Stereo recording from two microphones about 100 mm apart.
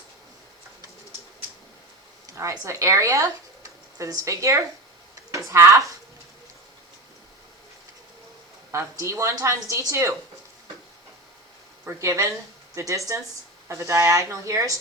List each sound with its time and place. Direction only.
2.3 s speech: 30° right (ahead or behind)
8.7 s a woman's voice: 30° right (ahead or behind)
11.9 s a woman's voice: 30° right (ahead or behind)